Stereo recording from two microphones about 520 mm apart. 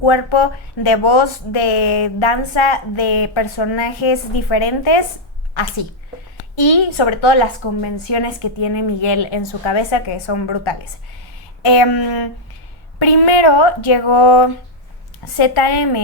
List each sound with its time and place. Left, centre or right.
0.0 s a woman's voice: left
6.6 s a woman's voice: left
15.6 s speech: left